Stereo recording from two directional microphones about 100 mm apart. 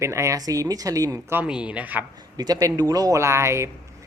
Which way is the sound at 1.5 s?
10° right (ahead or behind).